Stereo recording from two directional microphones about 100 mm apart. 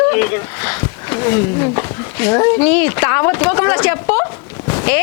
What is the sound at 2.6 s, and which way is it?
Speech, 20° left (ahead or behind).